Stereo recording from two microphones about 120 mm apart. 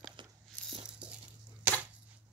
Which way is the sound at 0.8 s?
10° right (ahead or behind).